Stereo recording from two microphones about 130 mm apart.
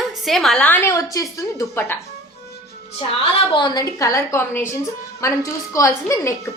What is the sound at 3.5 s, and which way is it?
Speech, 35° left (ahead or behind).